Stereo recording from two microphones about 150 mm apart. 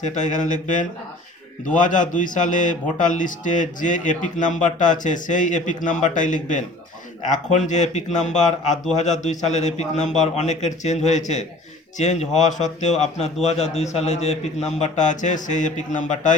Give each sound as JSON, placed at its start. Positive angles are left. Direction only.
{"t": 0.0, "sound": "a man's voice", "side_deg": 55}